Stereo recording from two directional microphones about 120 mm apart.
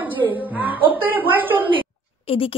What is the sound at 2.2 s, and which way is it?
Speech, 50° left (ahead or behind).